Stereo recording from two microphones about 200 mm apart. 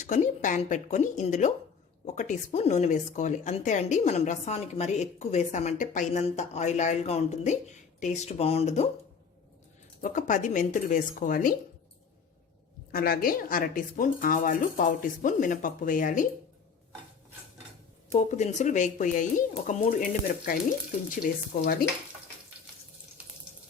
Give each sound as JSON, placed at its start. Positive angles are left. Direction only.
{"t": 0.0, "sound": "speech", "side_deg": 40}
{"t": 10.0, "sound": "speech", "side_deg": 40}
{"t": 12.9, "sound": "speech", "side_deg": 50}
{"t": 18.1, "sound": "speech", "side_deg": 35}